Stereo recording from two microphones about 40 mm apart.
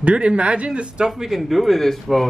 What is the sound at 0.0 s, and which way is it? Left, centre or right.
A man's voice, right.